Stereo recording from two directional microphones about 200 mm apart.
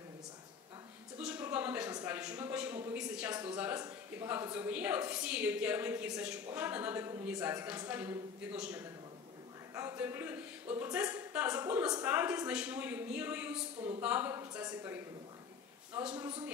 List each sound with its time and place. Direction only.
1.1 s a sound: 5° right (ahead or behind)
3.5 s a woman's voice: 10° right (ahead or behind)
13.7 s speech: 30° right (ahead or behind)
14.0 s a woman's voice: 10° right (ahead or behind)